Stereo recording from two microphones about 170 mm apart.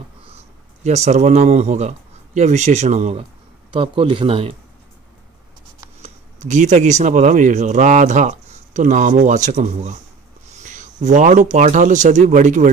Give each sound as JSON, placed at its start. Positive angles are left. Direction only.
{"t": 0.8, "sound": "speech", "side_deg": -40}
{"t": 3.7, "sound": "speech", "side_deg": -30}
{"t": 6.0, "sound": "speech", "side_deg": -45}